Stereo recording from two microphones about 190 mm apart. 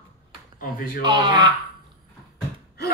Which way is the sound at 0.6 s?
45° left (ahead or behind).